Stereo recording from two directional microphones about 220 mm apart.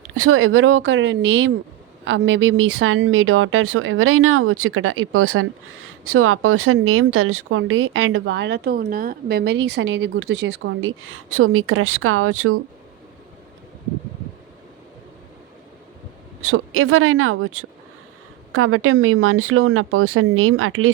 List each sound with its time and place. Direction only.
0.1 s speech: 75° right (ahead or behind)
16.4 s speech: 75° right (ahead or behind)